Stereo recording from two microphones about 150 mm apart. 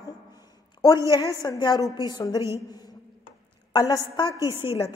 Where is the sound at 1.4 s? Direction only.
30° left (ahead or behind).